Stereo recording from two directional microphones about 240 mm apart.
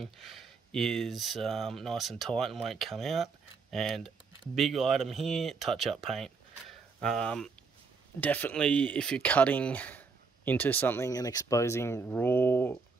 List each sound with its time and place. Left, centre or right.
0.0 s speech: centre